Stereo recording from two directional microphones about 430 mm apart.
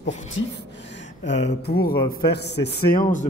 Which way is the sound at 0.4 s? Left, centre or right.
Centre.